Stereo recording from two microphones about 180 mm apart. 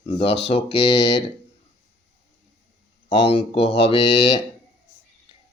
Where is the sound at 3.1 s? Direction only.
30° left (ahead or behind).